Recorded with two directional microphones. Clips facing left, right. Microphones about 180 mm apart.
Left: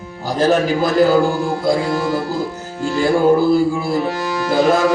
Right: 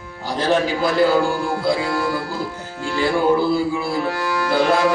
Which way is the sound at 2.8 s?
45° left (ahead or behind).